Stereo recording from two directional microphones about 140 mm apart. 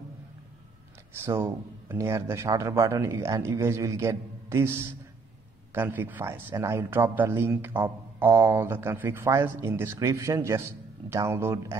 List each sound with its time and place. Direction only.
1.2 s speech: 20° right (ahead or behind)